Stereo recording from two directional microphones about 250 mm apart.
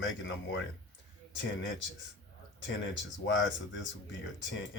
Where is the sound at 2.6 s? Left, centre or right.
Left.